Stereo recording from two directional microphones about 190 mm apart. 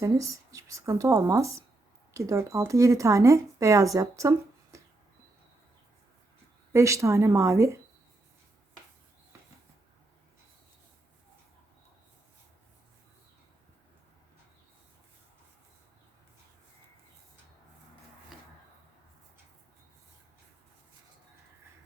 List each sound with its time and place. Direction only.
0.0 s speech: 15° right (ahead or behind)
6.7 s speech: 15° right (ahead or behind)